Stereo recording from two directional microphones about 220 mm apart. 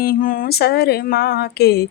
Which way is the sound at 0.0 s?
40° left (ahead or behind).